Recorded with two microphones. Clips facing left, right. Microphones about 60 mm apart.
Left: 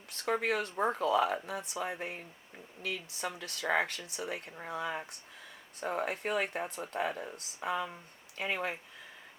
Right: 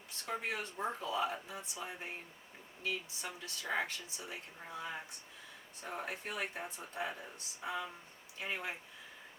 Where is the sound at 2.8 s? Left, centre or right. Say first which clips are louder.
Left 3 dB; left.